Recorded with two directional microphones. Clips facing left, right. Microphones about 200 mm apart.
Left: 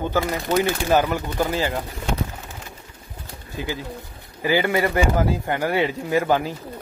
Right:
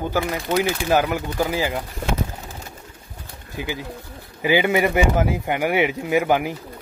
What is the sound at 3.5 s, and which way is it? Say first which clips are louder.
Speech: even; 15° right (ahead or behind).